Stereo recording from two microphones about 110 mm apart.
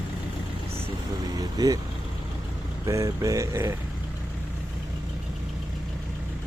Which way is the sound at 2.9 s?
30° right (ahead or behind).